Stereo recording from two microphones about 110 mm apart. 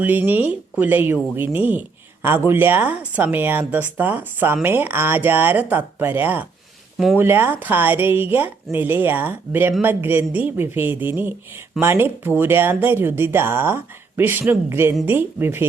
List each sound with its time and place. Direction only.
0.0 s speech: 15° right (ahead or behind)